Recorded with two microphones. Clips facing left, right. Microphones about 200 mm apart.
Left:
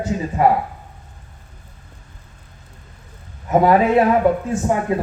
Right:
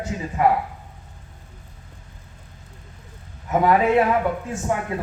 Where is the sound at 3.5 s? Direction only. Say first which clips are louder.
Left 4 dB; 35° left (ahead or behind).